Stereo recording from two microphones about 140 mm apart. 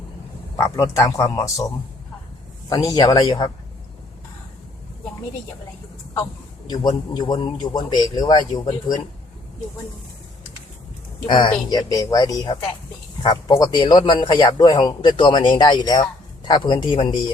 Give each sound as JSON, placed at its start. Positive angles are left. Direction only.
{"t": 0.5, "sound": "speech", "side_deg": 20}
{"t": 6.7, "sound": "a man's voice", "side_deg": 30}
{"t": 11.3, "sound": "a man's voice", "side_deg": 35}